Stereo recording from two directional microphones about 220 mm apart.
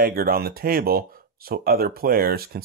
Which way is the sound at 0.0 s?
45° right (ahead or behind).